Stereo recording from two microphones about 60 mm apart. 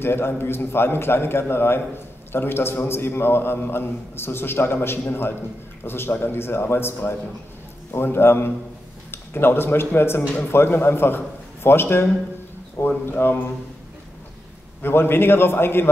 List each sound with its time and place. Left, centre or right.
0.0 s a man's voice: left
14.8 s a man's voice: left